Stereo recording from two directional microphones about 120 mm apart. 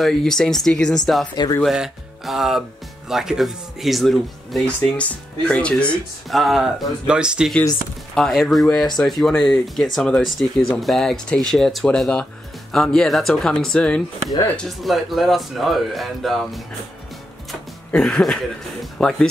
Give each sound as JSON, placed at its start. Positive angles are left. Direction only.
{"t": 0.0, "sound": "speech", "side_deg": 5}
{"t": 1.3, "sound": "speech", "side_deg": 35}
{"t": 1.6, "sound": "speech", "side_deg": 0}
{"t": 8.1, "sound": "speech", "side_deg": 5}